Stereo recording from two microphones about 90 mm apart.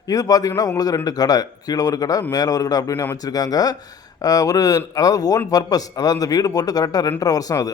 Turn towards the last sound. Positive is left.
turn(degrees=40)  # may be behind; listen again after turning